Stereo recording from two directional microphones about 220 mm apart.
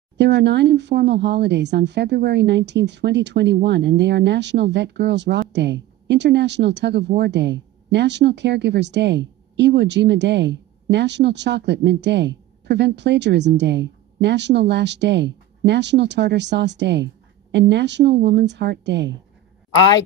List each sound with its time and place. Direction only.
0.2 s speech: 50° right (ahead or behind)